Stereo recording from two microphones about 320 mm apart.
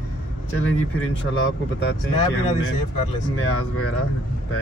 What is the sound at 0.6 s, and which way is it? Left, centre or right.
Speech, left.